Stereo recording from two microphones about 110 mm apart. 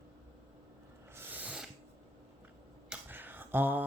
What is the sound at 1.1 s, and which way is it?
Owl, 20° right (ahead or behind).